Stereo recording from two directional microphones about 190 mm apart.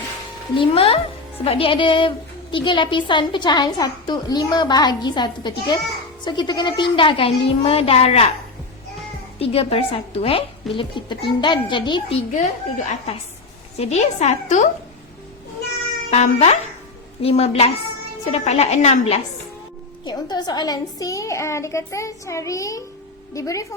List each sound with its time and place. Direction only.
0.5 s a woman's voice: 30° left (ahead or behind)
9.4 s speech: 30° left (ahead or behind)
16.0 s speech: 35° left (ahead or behind)
20.1 s a woman's voice: 20° left (ahead or behind)